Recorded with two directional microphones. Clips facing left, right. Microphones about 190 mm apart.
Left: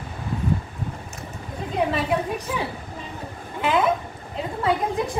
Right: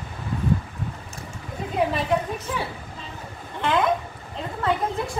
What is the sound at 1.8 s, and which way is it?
Speech, 5° right (ahead or behind).